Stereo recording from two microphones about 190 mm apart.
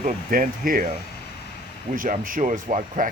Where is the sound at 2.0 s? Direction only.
45° right (ahead or behind).